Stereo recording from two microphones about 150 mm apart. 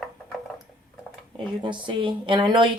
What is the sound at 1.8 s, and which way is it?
Speech, 35° right (ahead or behind).